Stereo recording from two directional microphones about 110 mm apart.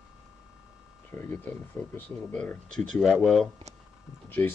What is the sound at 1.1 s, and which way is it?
Speech, 15° left (ahead or behind).